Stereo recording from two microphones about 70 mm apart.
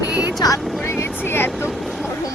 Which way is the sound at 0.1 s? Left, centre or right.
Centre.